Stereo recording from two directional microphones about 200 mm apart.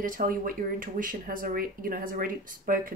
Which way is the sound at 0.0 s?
45° right (ahead or behind).